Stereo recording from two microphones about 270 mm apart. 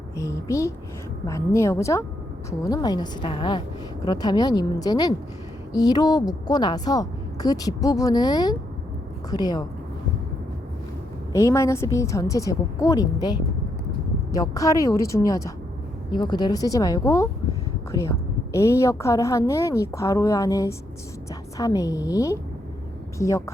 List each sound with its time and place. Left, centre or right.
0.2 s a woman's voice: centre
11.3 s a woman's voice: centre